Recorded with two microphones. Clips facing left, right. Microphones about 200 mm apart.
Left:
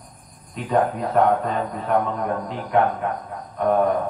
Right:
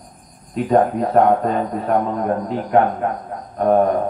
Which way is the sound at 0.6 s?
40° right (ahead or behind).